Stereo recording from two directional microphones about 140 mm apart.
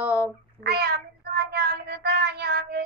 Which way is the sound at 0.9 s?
90° right.